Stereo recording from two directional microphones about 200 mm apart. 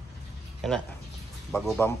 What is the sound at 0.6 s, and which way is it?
Speech, centre (ahead or behind).